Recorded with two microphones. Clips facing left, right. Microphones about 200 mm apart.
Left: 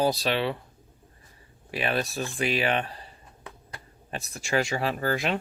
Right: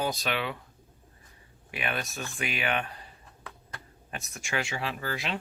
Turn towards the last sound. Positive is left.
turn(degrees=50)  # may be behind; listen again after turning